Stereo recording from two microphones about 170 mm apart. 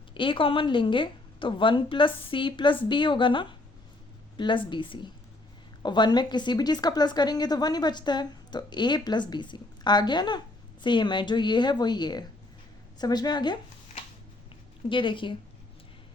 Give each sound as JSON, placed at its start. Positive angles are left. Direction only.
{"t": 0.1, "sound": "a woman's voice", "side_deg": 30}